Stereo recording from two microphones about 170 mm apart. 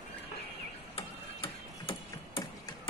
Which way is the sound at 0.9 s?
35° left (ahead or behind).